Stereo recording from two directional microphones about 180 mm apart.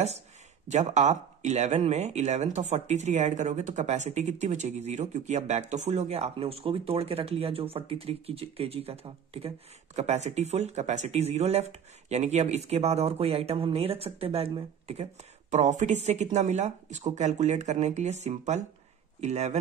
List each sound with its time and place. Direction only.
0.7 s speech: 40° right (ahead or behind)